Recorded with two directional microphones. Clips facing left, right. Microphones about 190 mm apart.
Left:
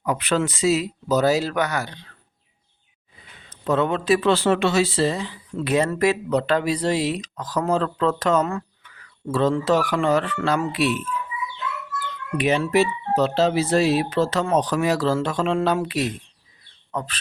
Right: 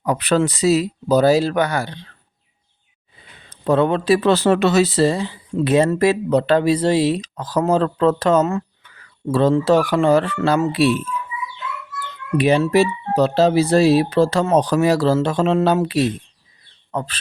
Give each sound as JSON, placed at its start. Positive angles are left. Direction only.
{"t": 0.0, "sound": "speech", "side_deg": -35}
{"t": 3.2, "sound": "speech", "side_deg": -35}
{"t": 12.4, "sound": "speech", "side_deg": -35}